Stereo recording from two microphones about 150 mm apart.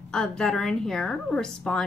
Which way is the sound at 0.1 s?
5° left (ahead or behind).